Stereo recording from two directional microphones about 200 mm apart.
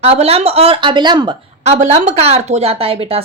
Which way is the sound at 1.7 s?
35° right (ahead or behind).